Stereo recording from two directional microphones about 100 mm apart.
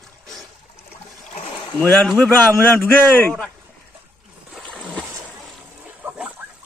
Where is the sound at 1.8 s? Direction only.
15° left (ahead or behind).